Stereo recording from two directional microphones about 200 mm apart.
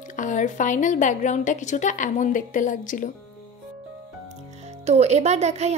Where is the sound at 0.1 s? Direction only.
40° left (ahead or behind).